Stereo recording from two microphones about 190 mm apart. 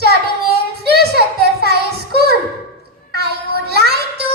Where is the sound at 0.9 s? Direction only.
55° right (ahead or behind).